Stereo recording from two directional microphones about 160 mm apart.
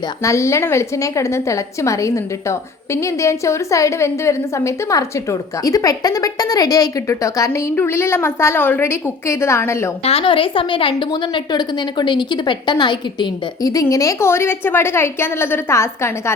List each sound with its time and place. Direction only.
0.2 s a woman's voice: 20° left (ahead or behind)
10.0 s a woman's voice: 40° left (ahead or behind); by 16.3 s 15° left (ahead or behind)